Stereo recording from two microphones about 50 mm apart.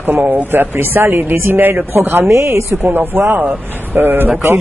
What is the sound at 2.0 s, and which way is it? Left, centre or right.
Speech, right.